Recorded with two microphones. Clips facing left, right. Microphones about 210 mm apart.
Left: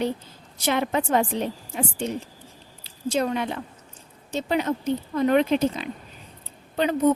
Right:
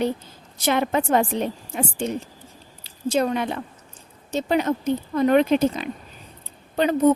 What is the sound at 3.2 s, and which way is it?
A woman's voice, 45° right (ahead or behind).